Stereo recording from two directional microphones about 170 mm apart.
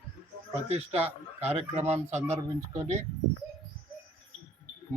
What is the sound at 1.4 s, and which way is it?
Speech, 40° right (ahead or behind).